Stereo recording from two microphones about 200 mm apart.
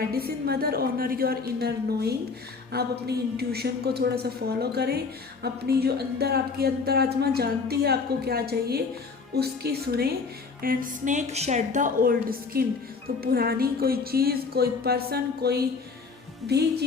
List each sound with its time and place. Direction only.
0.1 s a woman's voice: 50° right (ahead or behind)